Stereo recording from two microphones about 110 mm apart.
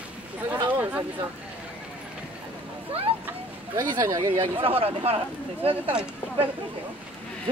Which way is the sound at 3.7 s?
35° right (ahead or behind).